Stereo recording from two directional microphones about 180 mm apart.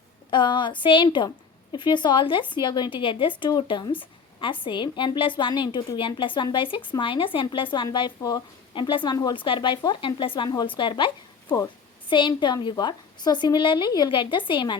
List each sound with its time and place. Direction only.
0.3 s a woman's voice: 25° left (ahead or behind)